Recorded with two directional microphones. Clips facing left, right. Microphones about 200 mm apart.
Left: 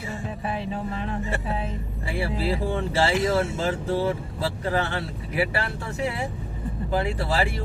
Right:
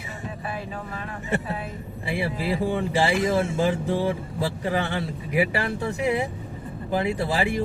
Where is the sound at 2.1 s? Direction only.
15° right (ahead or behind).